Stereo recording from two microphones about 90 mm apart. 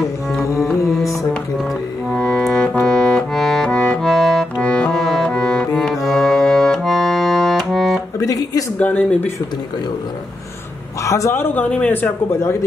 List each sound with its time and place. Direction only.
0.6 s music: centre (ahead or behind)
2.1 s music: 10° left (ahead or behind)
8.2 s music: 40° left (ahead or behind)
8.7 s speech: 20° left (ahead or behind)
11.0 s a man's voice: 35° left (ahead or behind)
11.5 s speech: 15° left (ahead or behind)